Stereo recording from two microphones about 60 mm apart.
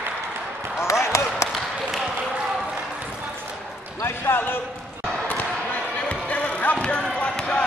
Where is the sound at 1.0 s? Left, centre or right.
Left.